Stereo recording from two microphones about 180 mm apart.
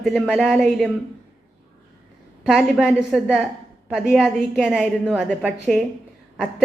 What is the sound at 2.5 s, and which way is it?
A woman's voice, 5° right (ahead or behind).